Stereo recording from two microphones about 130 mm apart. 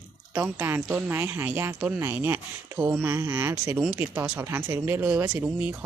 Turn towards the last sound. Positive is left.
turn(degrees=-15)  # may be behind; listen again after turning